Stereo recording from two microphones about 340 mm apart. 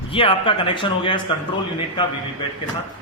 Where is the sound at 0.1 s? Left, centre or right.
Centre.